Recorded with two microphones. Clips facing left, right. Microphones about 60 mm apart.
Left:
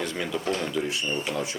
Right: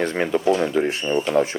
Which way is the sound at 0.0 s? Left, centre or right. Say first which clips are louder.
Right 9 dB; right.